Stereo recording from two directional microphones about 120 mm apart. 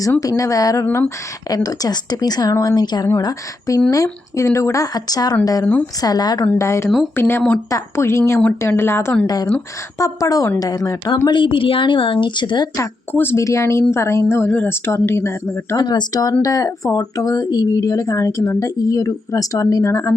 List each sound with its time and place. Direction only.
0.2 s speech: 30° left (ahead or behind)
6.4 s speech: 20° left (ahead or behind)
6.8 s speech: centre (ahead or behind)
7.2 s speech: 20° left (ahead or behind)
9.2 s speech: 30° left (ahead or behind)
11.3 s a woman's voice: 45° left (ahead or behind)
12.7 s speech: 20° left (ahead or behind)
15.8 s speech: 35° left (ahead or behind)